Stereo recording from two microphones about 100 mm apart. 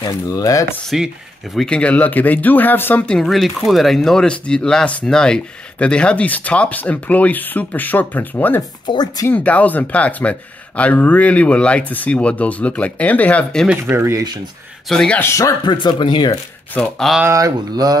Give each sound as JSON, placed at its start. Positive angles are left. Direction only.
{"t": 0.0, "sound": "speech", "side_deg": 35}
{"t": 0.8, "sound": "speech", "side_deg": 0}
{"t": 3.1, "sound": "speech", "side_deg": 0}
{"t": 8.8, "sound": "speech", "side_deg": 45}
{"t": 9.3, "sound": "speech", "side_deg": 15}
{"t": 13.8, "sound": "speech", "side_deg": -25}
{"t": 14.9, "sound": "speech", "side_deg": 5}
{"t": 15.1, "sound": "speech", "side_deg": 30}
{"t": 15.6, "sound": "speech", "side_deg": 50}
{"t": 17.3, "sound": "speech", "side_deg": -40}